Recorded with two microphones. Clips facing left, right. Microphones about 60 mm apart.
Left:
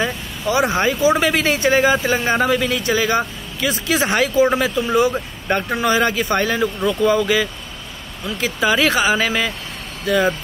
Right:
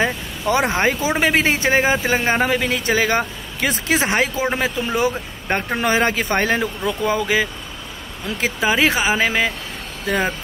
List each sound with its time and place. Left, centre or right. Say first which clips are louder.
0.5 s a man's voice: even; right
6.6 s a man's voice: left 4 dB; right